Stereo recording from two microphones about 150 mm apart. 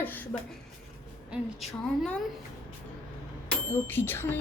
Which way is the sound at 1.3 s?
Centre (ahead or behind).